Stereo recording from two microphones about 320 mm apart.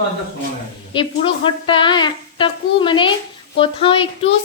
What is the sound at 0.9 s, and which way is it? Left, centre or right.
Speech, centre.